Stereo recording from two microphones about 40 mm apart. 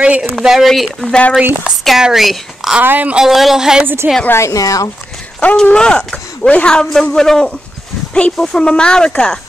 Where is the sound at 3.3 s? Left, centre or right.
Centre.